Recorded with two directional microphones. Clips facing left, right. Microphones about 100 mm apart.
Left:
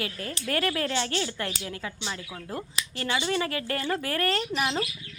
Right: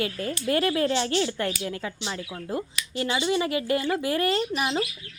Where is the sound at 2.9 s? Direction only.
20° right (ahead or behind).